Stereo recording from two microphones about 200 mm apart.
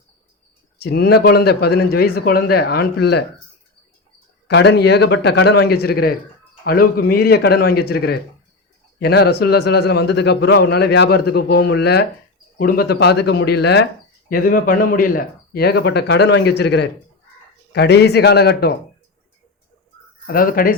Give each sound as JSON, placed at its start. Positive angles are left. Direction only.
{"t": 0.8, "sound": "speech", "side_deg": 55}
{"t": 4.4, "sound": "a man's voice", "side_deg": 60}
{"t": 20.2, "sound": "speech", "side_deg": 45}